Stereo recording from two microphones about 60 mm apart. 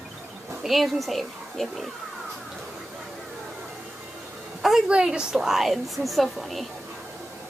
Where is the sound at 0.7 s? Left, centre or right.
Centre.